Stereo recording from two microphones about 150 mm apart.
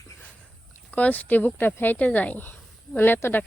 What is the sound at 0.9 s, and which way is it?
Speech, 10° left (ahead or behind).